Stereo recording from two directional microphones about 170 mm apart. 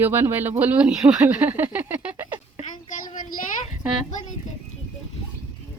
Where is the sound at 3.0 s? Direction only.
55° left (ahead or behind).